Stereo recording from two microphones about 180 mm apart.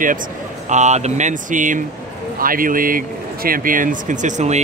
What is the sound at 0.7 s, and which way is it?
A man's voice, 40° right (ahead or behind).